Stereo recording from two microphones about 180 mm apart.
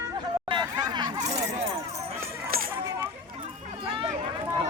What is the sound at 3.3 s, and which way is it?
Run, 30° right (ahead or behind).